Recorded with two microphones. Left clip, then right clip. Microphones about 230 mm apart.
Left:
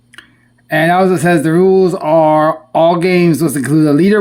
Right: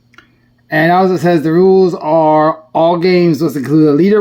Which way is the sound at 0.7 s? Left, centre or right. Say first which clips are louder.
Even; centre.